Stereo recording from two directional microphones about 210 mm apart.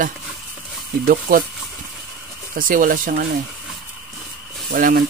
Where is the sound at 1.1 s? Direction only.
45° right (ahead or behind).